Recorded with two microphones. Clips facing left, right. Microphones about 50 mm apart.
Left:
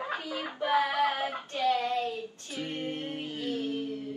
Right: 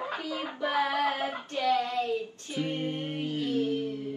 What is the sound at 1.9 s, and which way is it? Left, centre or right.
Music, right.